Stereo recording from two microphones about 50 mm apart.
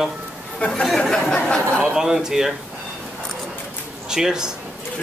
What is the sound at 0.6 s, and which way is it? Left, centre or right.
Speech, left.